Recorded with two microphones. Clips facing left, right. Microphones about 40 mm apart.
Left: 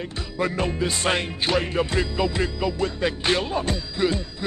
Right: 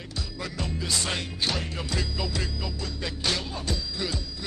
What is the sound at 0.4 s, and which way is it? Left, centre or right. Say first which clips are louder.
Music: left 11 dB; left.